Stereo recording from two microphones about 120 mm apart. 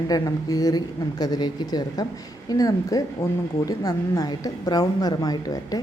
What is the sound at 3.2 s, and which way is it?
Speech, 20° left (ahead or behind).